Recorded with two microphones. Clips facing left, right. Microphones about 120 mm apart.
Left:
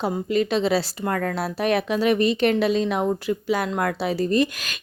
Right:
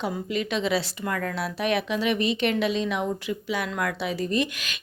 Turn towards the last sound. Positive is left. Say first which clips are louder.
# left 5 dB
turn(degrees=40)  # may be behind; listen again after turning